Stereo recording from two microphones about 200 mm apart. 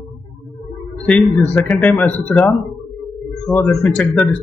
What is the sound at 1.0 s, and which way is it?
Speech, 5° left (ahead or behind).